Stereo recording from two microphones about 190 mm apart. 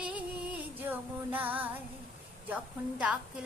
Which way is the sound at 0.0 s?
5° right (ahead or behind).